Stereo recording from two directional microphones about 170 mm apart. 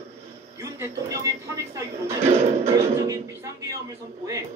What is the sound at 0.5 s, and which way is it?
Speech, 20° right (ahead or behind).